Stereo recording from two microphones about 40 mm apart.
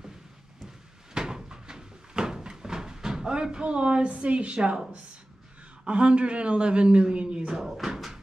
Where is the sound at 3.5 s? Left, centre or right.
Right.